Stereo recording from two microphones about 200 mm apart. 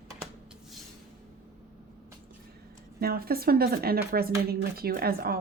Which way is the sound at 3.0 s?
50° right (ahead or behind).